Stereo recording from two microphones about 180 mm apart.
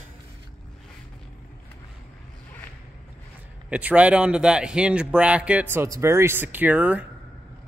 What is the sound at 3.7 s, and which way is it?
A man's voice, 10° right (ahead or behind).